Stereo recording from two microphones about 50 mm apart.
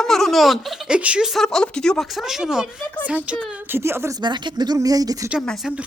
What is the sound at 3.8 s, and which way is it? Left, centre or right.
Speech, right.